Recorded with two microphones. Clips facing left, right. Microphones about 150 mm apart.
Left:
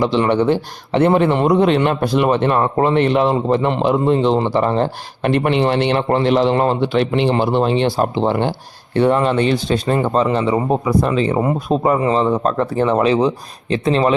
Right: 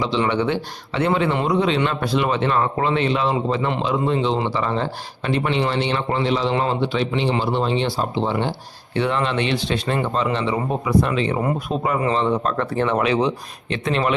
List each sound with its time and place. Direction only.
0.0 s a man's voice: 50° left (ahead or behind)
9.0 s speech: 45° left (ahead or behind)